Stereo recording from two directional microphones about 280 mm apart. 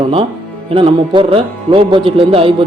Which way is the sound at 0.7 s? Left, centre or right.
Centre.